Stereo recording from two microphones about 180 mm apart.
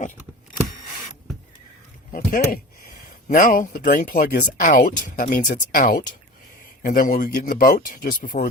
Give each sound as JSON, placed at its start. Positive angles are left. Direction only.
{"t": 2.1, "sound": "speech", "side_deg": 55}